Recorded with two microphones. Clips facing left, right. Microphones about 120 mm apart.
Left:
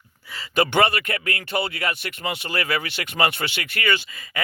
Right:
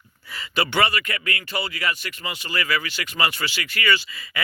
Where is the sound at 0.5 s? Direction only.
50° left (ahead or behind).